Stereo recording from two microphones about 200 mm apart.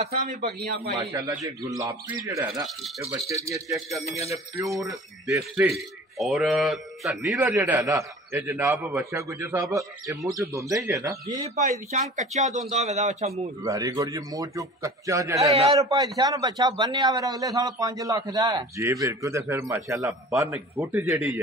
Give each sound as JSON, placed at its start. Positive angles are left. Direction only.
{"t": 0.0, "sound": "speech", "side_deg": -40}
{"t": 0.9, "sound": "a man's voice", "side_deg": -20}
{"t": 2.5, "sound": "speech", "side_deg": 0}
{"t": 3.0, "sound": "a man's voice", "side_deg": -15}
{"t": 4.6, "sound": "a man's voice", "side_deg": 0}
{"t": 11.5, "sound": "speech", "side_deg": -35}
{"t": 13.6, "sound": "a man's voice", "side_deg": -15}
{"t": 21.1, "sound": "speech", "side_deg": -5}